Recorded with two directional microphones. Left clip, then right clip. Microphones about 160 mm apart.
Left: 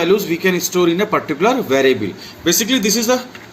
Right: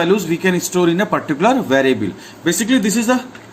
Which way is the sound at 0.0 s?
55° right (ahead or behind).